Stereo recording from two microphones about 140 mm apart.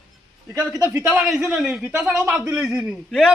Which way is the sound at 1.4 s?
5° right (ahead or behind).